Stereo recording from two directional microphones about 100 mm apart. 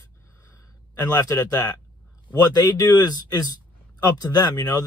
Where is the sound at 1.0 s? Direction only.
25° left (ahead or behind).